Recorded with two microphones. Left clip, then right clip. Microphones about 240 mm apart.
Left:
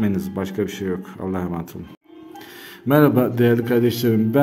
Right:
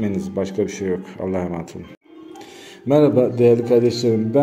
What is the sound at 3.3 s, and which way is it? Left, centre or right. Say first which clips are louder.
Speech: right 4 dB; left.